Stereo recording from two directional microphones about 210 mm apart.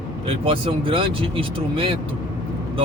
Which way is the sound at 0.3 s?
25° right (ahead or behind).